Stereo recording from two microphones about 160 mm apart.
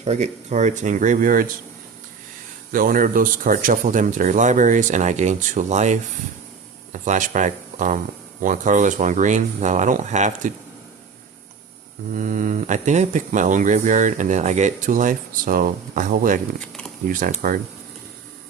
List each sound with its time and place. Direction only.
0.0 s speech: 45° right (ahead or behind)
2.7 s speech: 60° right (ahead or behind)
12.1 s speech: 50° right (ahead or behind)